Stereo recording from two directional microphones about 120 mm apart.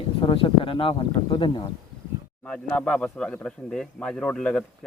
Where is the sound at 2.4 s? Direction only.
10° left (ahead or behind).